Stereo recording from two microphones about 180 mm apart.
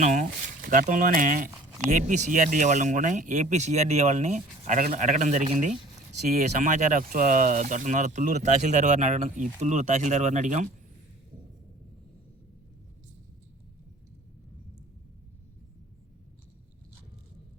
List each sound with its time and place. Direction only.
0.0 s speech: 45° right (ahead or behind)